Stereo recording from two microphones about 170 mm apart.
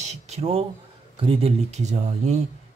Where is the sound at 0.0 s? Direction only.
40° right (ahead or behind).